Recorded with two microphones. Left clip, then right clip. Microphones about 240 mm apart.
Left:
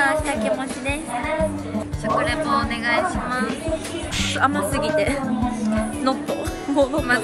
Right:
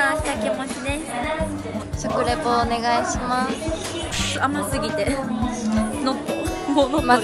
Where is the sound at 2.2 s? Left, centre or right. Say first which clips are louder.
Right 1 dB; centre.